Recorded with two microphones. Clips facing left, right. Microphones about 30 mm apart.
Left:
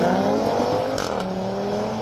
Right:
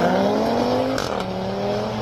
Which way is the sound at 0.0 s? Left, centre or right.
Right.